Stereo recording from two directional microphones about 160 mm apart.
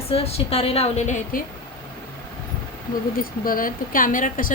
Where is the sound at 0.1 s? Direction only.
40° left (ahead or behind); by 1.5 s 55° left (ahead or behind).